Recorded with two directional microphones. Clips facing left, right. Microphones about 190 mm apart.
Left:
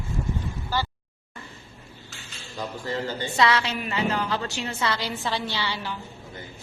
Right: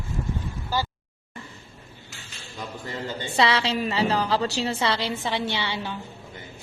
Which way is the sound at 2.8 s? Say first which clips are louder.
Left 3 dB; 25° right (ahead or behind).